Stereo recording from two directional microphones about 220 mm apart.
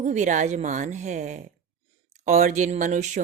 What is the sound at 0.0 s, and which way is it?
Speech, 35° right (ahead or behind).